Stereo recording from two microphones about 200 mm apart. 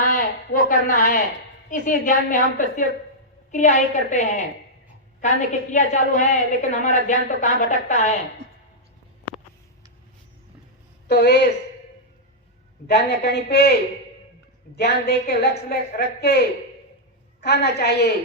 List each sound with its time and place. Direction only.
0.0 s a woman's voice: 45° left (ahead or behind)
11.1 s a woman's voice: 55° left (ahead or behind)
13.1 s a woman's voice: 55° left (ahead or behind)
14.8 s a woman's voice: 55° left (ahead or behind)